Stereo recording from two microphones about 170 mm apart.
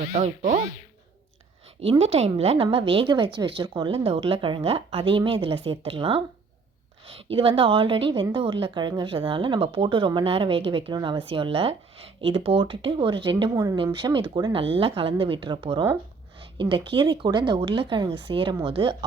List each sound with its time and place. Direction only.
0.1 s speech: 45° right (ahead or behind)
1.8 s a woman's voice: 35° right (ahead or behind)
7.3 s a woman's voice: 30° right (ahead or behind)